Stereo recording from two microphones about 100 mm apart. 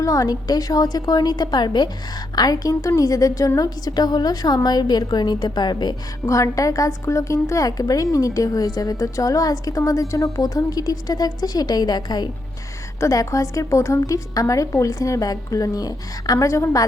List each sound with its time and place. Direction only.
0.0 s a woman's voice: 35° left (ahead or behind)
6.2 s a woman's voice: 35° left (ahead or behind)